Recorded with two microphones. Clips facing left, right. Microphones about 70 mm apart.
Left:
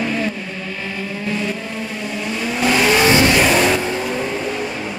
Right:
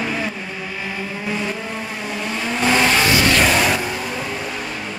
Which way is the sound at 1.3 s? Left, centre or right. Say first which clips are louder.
Left 1 dB; centre.